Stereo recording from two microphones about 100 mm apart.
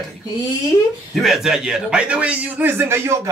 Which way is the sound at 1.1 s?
Centre (ahead or behind).